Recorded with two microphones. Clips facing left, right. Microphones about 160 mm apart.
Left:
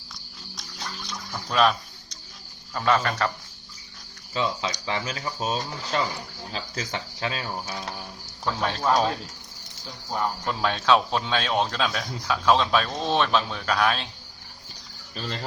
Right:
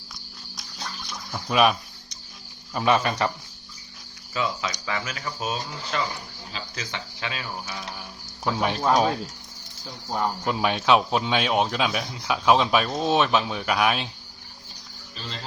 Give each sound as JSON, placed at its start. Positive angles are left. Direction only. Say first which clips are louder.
{"t": 1.3, "sound": "a sound", "louder": "right 1 dB", "side_deg": -10}
{"t": 2.7, "sound": "speech", "louder": "right 1 dB", "side_deg": -15}
{"t": 4.4, "sound": "speech", "louder": "left 1 dB", "side_deg": 30}
{"t": 8.4, "sound": "speech", "louder": "right 2 dB", "side_deg": -15}